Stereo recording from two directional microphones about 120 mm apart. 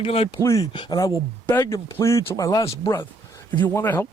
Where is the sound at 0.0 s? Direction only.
55° left (ahead or behind).